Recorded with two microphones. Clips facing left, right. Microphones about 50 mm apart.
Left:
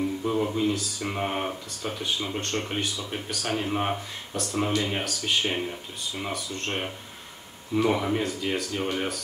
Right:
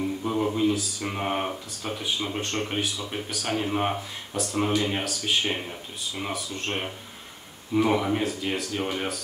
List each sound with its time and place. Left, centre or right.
0.2 s speech: centre